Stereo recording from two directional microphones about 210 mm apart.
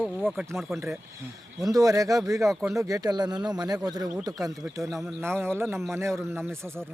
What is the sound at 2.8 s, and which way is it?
Speech, 15° right (ahead or behind).